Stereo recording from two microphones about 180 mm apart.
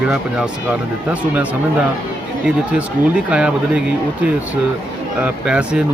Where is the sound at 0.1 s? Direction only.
5° right (ahead or behind).